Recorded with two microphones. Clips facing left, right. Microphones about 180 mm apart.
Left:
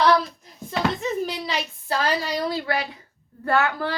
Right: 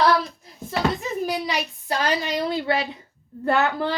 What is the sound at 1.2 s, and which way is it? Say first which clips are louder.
A woman's voice: right 2 dB; 15° right (ahead or behind).